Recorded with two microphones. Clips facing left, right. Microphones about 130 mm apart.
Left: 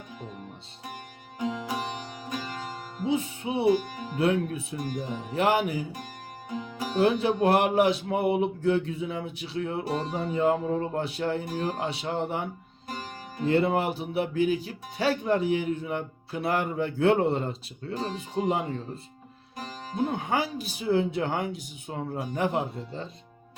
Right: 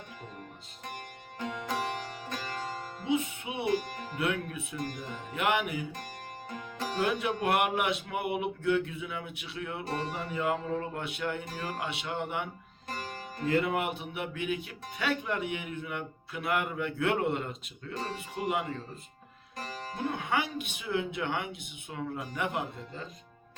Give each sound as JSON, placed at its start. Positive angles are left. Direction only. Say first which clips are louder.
{"t": 1.4, "sound": "music", "louder": "left 3 dB", "side_deg": 10}
{"t": 3.1, "sound": "music", "louder": "left 3 dB", "side_deg": 35}
{"t": 3.9, "sound": "music", "louder": "left 4 dB", "side_deg": 10}
{"t": 4.2, "sound": "speech", "louder": "left 7 dB", "side_deg": 30}
{"t": 4.8, "sound": "speech", "louder": "left 4 dB", "side_deg": 10}
{"t": 5.3, "sound": "speech", "louder": "left 5 dB", "side_deg": 35}
{"t": 6.5, "sound": "music", "louder": "left 4 dB", "side_deg": 10}
{"t": 7.0, "sound": "speech", "louder": "left 8 dB", "side_deg": 30}
{"t": 11.5, "sound": "music", "louder": "left 7 dB", "side_deg": 20}
{"t": 11.9, "sound": "speech", "louder": "left 5 dB", "side_deg": 35}
{"t": 18.4, "sound": "music", "louder": "left 6 dB", "side_deg": 25}
{"t": 19.5, "sound": "music", "louder": "left 7 dB", "side_deg": 10}
{"t": 20.1, "sound": "speech", "louder": "left 3 dB", "side_deg": 35}